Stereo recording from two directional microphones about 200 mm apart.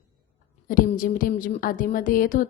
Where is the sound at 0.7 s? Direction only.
45° left (ahead or behind).